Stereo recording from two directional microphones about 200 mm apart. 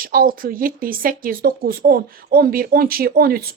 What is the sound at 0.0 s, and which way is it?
A woman's voice, 45° right (ahead or behind).